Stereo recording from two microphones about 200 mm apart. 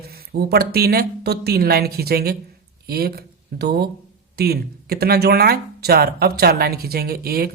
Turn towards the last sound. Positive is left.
turn(degrees=-50)  # may be behind; listen again after turning